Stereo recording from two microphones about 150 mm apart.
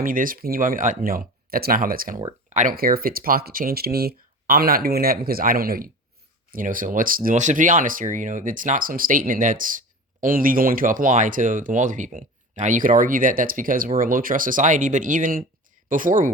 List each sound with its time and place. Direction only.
0.0 s speech: 65° right (ahead or behind)
6.5 s speech: 65° right (ahead or behind)